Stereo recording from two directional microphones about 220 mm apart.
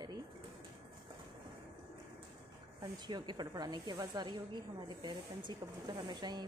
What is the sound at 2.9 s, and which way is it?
Speech, 20° right (ahead or behind).